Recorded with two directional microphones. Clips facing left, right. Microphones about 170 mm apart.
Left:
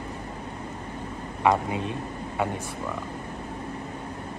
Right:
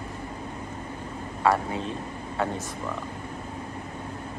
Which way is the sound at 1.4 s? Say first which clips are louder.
Left 1 dB; 15° left (ahead or behind).